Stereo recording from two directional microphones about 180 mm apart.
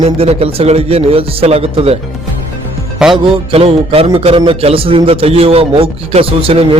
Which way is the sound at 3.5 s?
35° right (ahead or behind).